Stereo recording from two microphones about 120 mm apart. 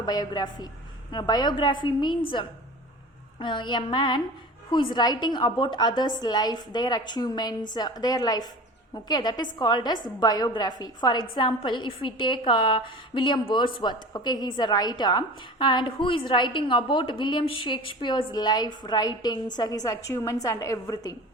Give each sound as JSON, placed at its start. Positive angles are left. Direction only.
{"t": 0.0, "sound": "a woman's voice", "side_deg": 35}